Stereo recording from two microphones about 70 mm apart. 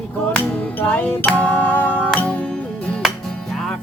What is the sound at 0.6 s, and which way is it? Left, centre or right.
Music, left.